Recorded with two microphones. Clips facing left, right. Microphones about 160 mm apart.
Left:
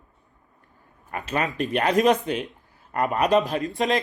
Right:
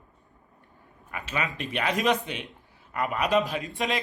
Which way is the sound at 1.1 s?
45° left (ahead or behind).